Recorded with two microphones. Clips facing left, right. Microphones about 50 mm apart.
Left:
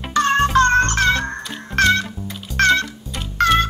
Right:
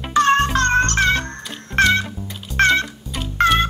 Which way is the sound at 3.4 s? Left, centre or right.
Centre.